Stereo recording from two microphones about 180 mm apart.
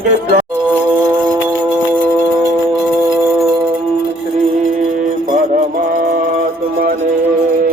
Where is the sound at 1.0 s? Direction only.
20° right (ahead or behind).